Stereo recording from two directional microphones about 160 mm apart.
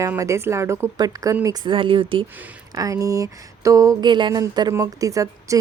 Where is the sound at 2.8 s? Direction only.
20° right (ahead or behind).